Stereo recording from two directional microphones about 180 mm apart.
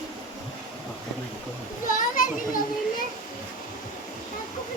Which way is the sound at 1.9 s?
45° left (ahead or behind).